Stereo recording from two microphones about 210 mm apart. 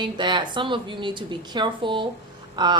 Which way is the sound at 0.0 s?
20° right (ahead or behind).